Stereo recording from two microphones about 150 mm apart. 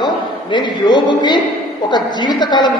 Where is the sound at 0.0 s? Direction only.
30° left (ahead or behind).